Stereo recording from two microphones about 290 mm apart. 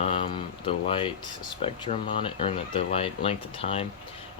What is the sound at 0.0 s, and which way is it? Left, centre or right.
Speech, centre.